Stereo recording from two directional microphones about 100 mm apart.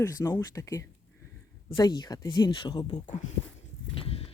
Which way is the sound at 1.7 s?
45° left (ahead or behind).